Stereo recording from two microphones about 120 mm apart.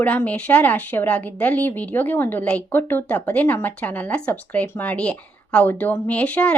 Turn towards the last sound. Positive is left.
turn(degrees=10)  # may be behind; listen again after turning